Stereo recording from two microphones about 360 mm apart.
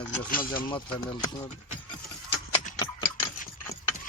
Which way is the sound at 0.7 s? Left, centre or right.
Centre.